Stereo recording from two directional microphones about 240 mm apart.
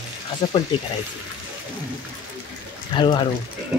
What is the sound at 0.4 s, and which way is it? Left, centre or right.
Speech, left.